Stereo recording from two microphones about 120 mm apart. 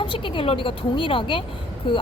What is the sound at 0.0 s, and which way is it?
A woman's voice, 45° left (ahead or behind).